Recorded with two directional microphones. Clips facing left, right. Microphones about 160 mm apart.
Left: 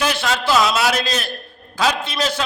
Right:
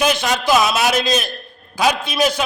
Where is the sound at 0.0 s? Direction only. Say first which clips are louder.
Right 3 dB; 20° right (ahead or behind).